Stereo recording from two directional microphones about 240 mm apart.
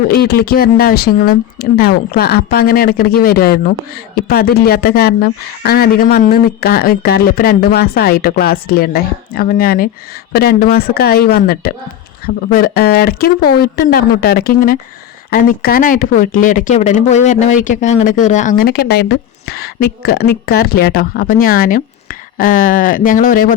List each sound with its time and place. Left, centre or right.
0.1 s speech: left